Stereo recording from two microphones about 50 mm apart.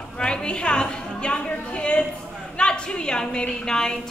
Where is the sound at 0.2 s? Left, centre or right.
Centre.